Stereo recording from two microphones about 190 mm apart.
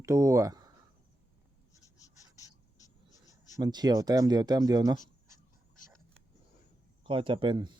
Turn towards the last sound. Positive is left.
turn(degrees=-25)  # may be behind; listen again after turning